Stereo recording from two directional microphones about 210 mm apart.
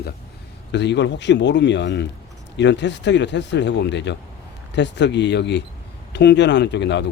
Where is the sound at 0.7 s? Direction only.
55° left (ahead or behind).